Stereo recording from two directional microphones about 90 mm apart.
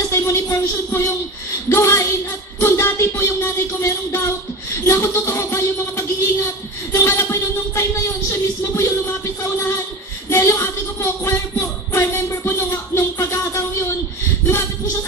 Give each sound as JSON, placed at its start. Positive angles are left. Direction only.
{"t": 0.1, "sound": "speech", "side_deg": 30}
{"t": 4.8, "sound": "a sound", "side_deg": 30}
{"t": 7.0, "sound": "speech", "side_deg": 25}
{"t": 10.3, "sound": "music", "side_deg": 30}